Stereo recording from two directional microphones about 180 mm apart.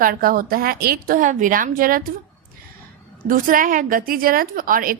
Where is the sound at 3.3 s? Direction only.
50° right (ahead or behind).